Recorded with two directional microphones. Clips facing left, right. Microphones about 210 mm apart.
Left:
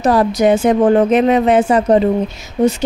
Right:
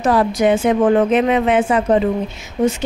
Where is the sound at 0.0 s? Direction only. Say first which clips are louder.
Left 2 dB; 40° left (ahead or behind).